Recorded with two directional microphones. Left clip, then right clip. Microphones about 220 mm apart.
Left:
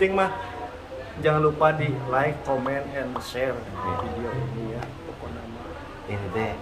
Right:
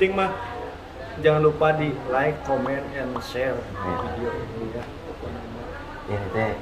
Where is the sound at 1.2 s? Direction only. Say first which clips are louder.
Right 2 dB; 15° left (ahead or behind).